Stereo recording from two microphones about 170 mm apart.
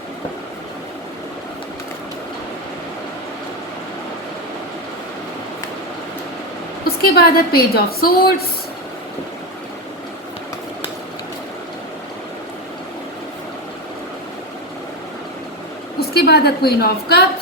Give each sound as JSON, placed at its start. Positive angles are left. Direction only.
{"t": 6.8, "sound": "a woman's voice", "side_deg": 65}
{"t": 16.0, "sound": "a woman's voice", "side_deg": 70}